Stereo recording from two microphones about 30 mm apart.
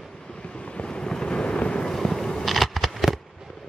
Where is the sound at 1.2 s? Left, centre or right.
Left.